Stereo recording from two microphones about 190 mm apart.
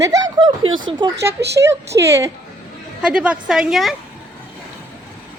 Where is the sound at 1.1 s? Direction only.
60° right (ahead or behind).